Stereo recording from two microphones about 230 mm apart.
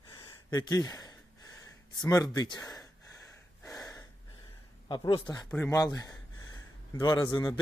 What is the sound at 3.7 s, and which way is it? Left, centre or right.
Gasp, centre.